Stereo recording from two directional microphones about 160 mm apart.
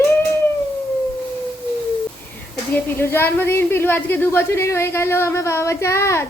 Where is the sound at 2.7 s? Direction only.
15° left (ahead or behind).